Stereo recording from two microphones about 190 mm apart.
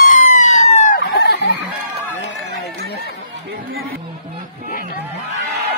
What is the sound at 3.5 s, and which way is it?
Music, 55° right (ahead or behind).